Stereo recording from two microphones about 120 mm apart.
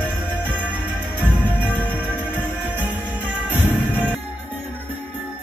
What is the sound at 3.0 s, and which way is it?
Music, 15° right (ahead or behind).